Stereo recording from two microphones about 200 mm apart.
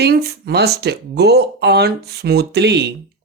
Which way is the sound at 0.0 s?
55° right (ahead or behind).